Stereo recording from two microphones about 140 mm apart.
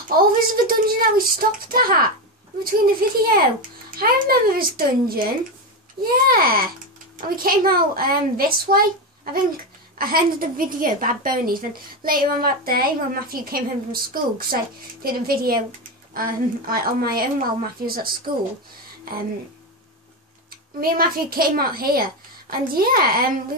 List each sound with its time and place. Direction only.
0.1 s a woman's voice: 90° right
20.4 s a woman's voice: 90° right